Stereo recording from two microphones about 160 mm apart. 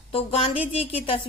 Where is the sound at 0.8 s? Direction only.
35° left (ahead or behind).